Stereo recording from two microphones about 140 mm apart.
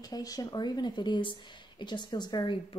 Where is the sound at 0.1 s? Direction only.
25° left (ahead or behind).